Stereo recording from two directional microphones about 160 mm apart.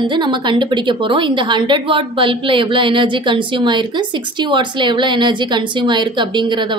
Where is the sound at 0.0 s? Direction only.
30° right (ahead or behind).